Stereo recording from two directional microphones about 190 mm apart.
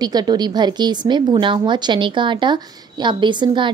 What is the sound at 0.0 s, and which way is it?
A woman's voice, 20° right (ahead or behind).